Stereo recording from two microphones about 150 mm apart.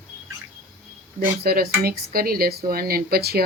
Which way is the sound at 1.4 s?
90° right.